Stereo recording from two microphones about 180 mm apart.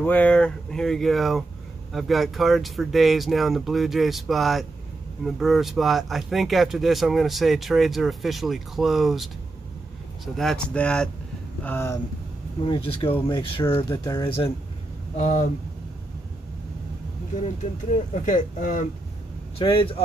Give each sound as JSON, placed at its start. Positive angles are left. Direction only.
{"t": 0.0, "sound": "speech", "side_deg": 10}
{"t": 12.6, "sound": "speech", "side_deg": 30}
{"t": 15.1, "sound": "speech", "side_deg": 40}
{"t": 18.2, "sound": "speech", "side_deg": 45}
{"t": 19.6, "sound": "speech", "side_deg": 30}